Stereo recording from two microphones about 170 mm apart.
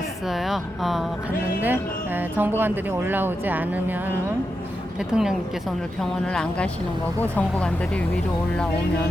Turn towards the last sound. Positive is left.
turn(degrees=5)  # may be behind; listen again after turning